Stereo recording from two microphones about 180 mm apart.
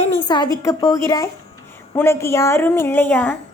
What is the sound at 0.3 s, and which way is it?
A woman's voice, 20° left (ahead or behind).